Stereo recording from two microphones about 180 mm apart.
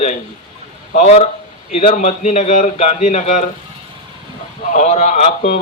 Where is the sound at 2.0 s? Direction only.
40° left (ahead or behind).